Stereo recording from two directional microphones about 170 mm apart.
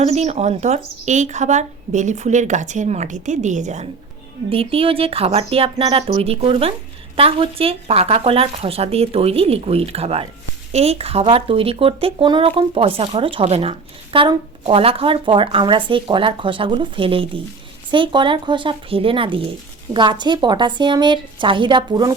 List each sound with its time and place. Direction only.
0.0 s a woman's voice: 40° right (ahead or behind)
4.4 s speech: 35° right (ahead or behind)